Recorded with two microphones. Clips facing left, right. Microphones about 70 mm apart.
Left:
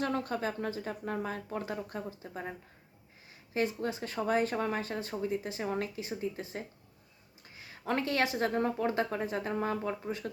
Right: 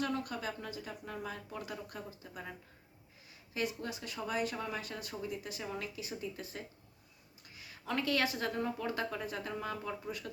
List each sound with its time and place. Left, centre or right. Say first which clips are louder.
0.0 s speech: left 4 dB; left
6.0 s speech: left 5 dB; left